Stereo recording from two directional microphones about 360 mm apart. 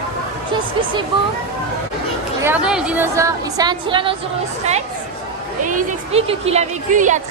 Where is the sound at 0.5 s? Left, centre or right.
Centre.